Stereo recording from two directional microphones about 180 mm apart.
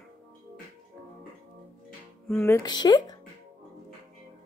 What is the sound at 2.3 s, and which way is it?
Speech, 15° left (ahead or behind).